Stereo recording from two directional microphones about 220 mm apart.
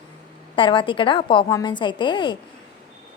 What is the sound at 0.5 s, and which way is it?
A woman's voice, 20° left (ahead or behind).